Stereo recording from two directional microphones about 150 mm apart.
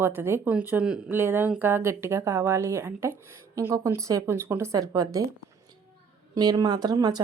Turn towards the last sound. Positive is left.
turn(degrees=-25)  # may be behind; listen again after turning